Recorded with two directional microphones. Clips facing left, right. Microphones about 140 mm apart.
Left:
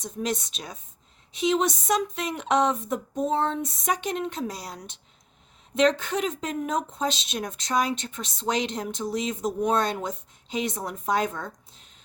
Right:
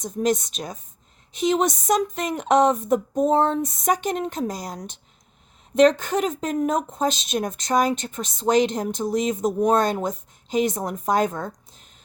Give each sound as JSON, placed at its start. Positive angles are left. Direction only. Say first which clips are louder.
{"t": 0.0, "sound": "speech", "louder": "right 7 dB", "side_deg": -45}